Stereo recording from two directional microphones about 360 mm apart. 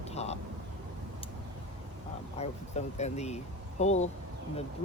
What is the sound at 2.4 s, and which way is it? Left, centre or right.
Speech, centre.